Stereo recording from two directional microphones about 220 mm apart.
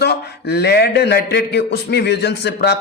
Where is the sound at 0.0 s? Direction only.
50° left (ahead or behind).